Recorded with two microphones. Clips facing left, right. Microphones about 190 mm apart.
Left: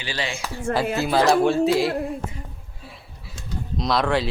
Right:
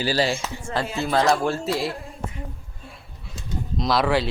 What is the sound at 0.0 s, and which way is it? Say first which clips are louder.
Speech: right 7 dB; 40° right (ahead or behind).